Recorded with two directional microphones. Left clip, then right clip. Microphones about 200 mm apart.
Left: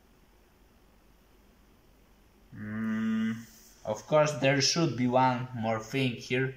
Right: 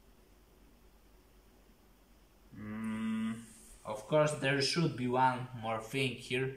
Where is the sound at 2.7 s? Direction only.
5° right (ahead or behind).